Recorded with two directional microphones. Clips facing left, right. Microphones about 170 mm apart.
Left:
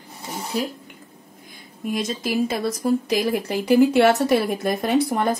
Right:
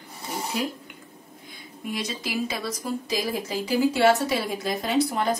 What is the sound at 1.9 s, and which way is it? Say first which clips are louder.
Speech: left 6 dB; 50° left (ahead or behind).